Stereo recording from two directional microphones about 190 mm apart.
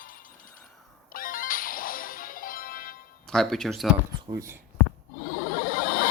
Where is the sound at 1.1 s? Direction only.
45° left (ahead or behind).